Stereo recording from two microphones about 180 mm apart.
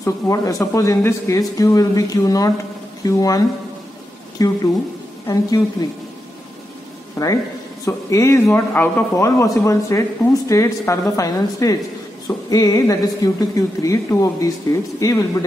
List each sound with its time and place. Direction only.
0.0 s a man's voice: 15° left (ahead or behind)
7.2 s a man's voice: 20° left (ahead or behind)